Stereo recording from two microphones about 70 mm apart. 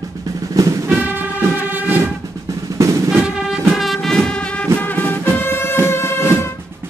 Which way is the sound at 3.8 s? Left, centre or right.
Centre.